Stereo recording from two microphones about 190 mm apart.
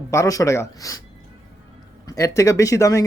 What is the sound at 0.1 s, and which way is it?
Speech, 15° left (ahead or behind).